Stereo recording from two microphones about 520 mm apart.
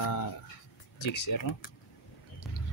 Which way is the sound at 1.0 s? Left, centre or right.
Left.